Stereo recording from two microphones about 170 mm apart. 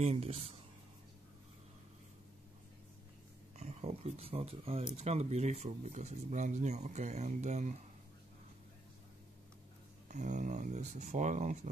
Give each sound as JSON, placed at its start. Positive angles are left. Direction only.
{"t": 0.0, "sound": "speech", "side_deg": -40}
{"t": 3.5, "sound": "speech", "side_deg": -40}
{"t": 10.1, "sound": "speech", "side_deg": -45}